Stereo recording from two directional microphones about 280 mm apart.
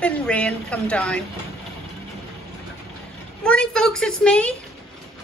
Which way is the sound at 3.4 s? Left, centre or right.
Centre.